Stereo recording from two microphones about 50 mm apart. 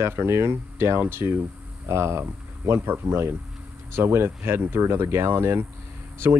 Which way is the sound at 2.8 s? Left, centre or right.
Right.